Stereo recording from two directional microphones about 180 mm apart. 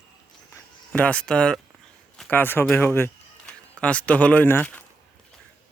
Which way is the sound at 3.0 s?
10° left (ahead or behind).